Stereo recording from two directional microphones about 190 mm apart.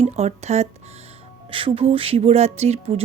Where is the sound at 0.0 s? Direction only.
35° right (ahead or behind).